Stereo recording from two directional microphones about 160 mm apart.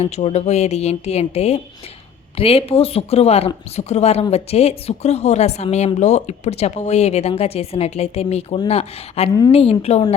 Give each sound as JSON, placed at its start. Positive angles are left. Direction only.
{"t": 0.0, "sound": "speech", "side_deg": 40}